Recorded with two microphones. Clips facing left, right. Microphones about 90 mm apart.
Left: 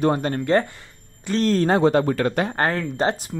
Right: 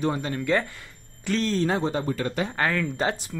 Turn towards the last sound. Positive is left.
turn(degrees=40)  # may be behind; listen again after turning